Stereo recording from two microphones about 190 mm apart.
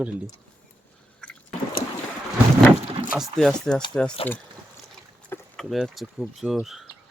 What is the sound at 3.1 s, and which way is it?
Speech, centre (ahead or behind).